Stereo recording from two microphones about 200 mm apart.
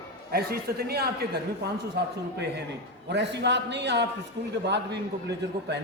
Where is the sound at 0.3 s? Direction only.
50° right (ahead or behind).